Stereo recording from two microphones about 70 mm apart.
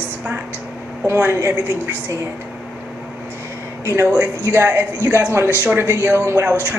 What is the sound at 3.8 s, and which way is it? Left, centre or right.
A woman's voice, right.